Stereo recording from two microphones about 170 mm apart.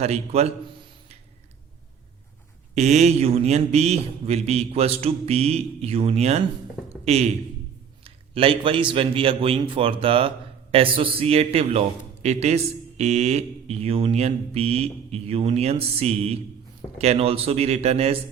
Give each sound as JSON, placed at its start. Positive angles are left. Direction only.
{"t": 0.0, "sound": "a man's voice", "side_deg": -40}
{"t": 2.7, "sound": "a man's voice", "side_deg": -40}